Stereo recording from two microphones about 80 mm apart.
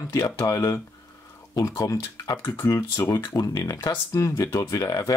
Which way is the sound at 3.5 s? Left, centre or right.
Left.